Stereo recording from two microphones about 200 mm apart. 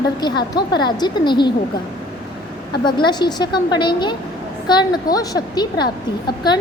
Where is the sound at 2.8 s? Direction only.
20° left (ahead or behind).